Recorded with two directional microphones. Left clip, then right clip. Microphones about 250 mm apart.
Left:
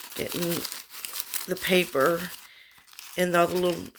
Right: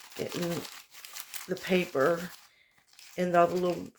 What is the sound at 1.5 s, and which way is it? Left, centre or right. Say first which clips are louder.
Speech: left 5 dB; left.